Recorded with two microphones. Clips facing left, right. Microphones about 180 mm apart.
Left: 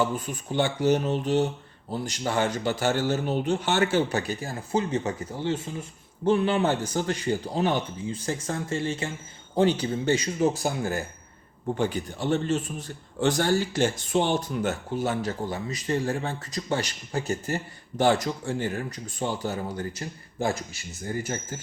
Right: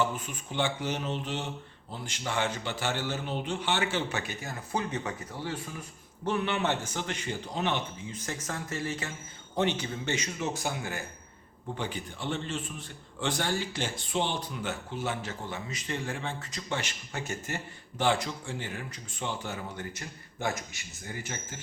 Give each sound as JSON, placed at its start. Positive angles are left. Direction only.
{"t": 0.5, "sound": "a man's voice", "side_deg": 40}